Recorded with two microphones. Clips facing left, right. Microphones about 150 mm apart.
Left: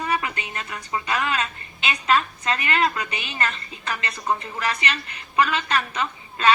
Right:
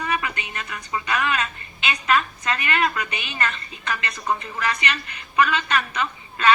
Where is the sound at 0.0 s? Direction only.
30° left (ahead or behind).